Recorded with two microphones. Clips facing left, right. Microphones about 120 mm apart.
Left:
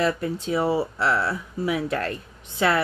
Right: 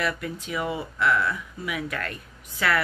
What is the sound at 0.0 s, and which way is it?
Speech, 30° left (ahead or behind).